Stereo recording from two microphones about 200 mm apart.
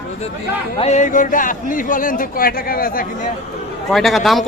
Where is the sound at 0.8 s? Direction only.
35° left (ahead or behind).